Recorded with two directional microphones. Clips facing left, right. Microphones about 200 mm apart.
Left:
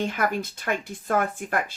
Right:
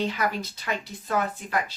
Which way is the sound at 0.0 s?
50° left (ahead or behind).